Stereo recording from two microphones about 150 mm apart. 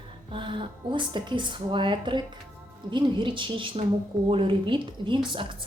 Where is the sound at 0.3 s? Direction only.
35° right (ahead or behind).